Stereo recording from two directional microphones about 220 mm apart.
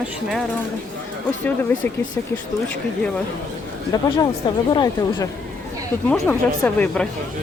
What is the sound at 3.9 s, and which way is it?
A woman's voice, 20° left (ahead or behind).